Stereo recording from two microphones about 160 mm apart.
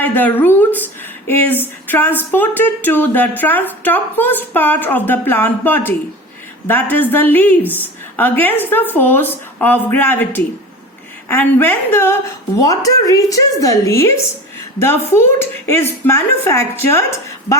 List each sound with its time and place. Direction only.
0.0 s speech: 10° left (ahead or behind)
6.9 s a woman's voice: 10° left (ahead or behind)